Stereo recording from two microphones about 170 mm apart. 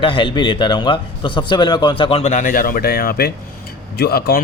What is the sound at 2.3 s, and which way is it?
Speech, 55° left (ahead or behind).